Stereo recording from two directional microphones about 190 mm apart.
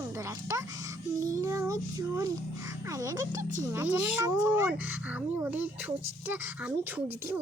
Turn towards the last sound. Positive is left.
turn(degrees=-10)  # may be behind; listen again after turning